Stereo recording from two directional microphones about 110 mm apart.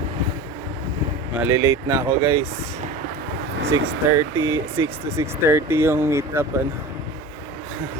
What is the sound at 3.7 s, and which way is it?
Speech, 30° right (ahead or behind).